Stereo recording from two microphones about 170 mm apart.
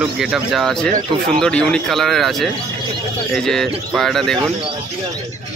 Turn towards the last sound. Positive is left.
turn(degrees=0)  # may be behind; listen again after turning